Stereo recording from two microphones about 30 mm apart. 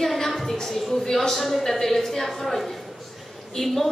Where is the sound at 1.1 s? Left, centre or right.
Centre.